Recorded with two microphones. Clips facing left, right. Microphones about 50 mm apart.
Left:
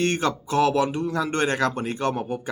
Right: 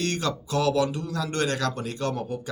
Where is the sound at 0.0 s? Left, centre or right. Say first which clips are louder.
Left 4 dB; left.